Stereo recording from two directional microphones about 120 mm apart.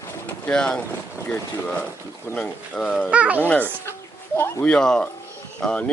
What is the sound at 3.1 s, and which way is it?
Speech, 10° right (ahead or behind).